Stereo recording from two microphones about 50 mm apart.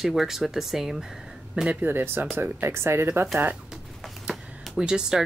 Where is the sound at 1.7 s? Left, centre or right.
Right.